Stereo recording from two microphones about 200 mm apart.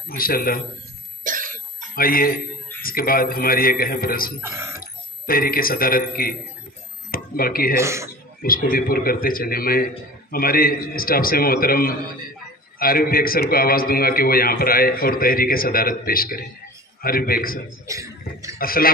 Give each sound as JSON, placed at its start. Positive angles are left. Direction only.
{"t": 0.2, "sound": "a man's voice", "side_deg": 45}
{"t": 1.2, "sound": "cough", "side_deg": -40}
{"t": 2.0, "sound": "a man's voice", "side_deg": 45}
{"t": 4.4, "sound": "speech", "side_deg": -15}
{"t": 4.7, "sound": "speech", "side_deg": 45}
{"t": 7.1, "sound": "a sound", "side_deg": 45}
{"t": 7.7, "sound": "speech", "side_deg": -15}
{"t": 8.4, "sound": "a man's voice", "side_deg": 45}
{"t": 17.8, "sound": "speech", "side_deg": -15}
{"t": 18.6, "sound": "a man's voice", "side_deg": 45}